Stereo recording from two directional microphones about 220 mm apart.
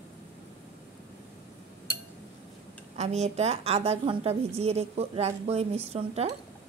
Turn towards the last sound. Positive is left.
turn(degrees=-30)  # may be behind; listen again after turning